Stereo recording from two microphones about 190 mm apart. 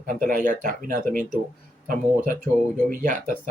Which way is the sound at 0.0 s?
45° right (ahead or behind).